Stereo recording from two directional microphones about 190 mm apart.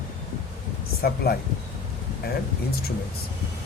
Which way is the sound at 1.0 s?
55° left (ahead or behind).